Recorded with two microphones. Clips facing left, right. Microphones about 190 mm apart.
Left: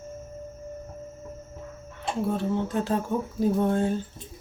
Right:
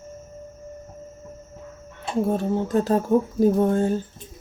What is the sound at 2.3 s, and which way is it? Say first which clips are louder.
Speech: right 4 dB; 40° right (ahead or behind).